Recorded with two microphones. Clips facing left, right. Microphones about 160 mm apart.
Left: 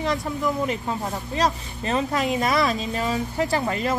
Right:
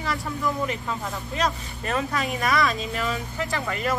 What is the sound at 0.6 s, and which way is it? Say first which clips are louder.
A woman's voice: left 3 dB; 30° left (ahead or behind).